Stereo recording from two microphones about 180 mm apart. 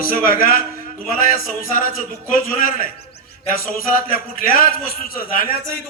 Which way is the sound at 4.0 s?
50° left (ahead or behind).